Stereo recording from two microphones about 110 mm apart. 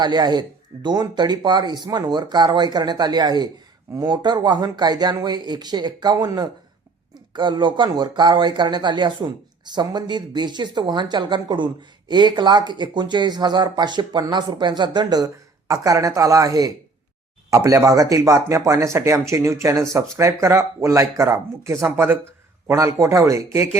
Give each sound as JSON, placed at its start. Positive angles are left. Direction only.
{"t": 0.0, "sound": "speech", "side_deg": -40}